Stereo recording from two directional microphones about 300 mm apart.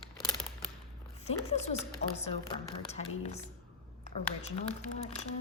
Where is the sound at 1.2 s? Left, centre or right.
Left.